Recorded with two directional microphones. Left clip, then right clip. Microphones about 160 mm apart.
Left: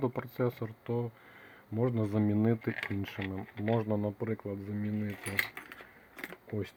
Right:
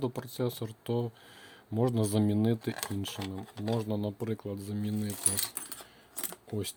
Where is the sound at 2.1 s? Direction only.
45° right (ahead or behind); by 3.2 s 25° right (ahead or behind).